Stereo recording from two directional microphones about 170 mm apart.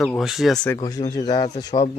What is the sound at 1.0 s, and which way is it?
Speech, 35° left (ahead or behind).